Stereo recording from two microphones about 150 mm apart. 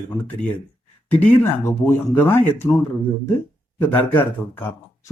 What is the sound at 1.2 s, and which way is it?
A man's voice, 15° left (ahead or behind).